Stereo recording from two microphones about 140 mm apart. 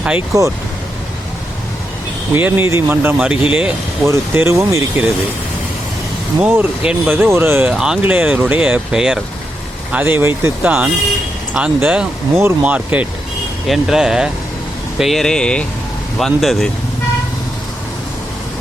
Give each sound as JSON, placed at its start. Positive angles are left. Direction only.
{"t": 0.3, "sound": "speech", "side_deg": -25}
{"t": 2.3, "sound": "speech", "side_deg": -15}
{"t": 4.0, "sound": "speech", "side_deg": -20}
{"t": 6.4, "sound": "speech", "side_deg": -10}
{"t": 7.7, "sound": "speech", "side_deg": -5}